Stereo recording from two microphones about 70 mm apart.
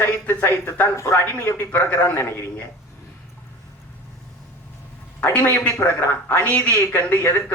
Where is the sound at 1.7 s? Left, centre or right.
Left.